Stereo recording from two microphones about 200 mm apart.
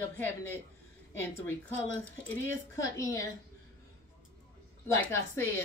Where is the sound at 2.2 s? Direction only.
15° left (ahead or behind).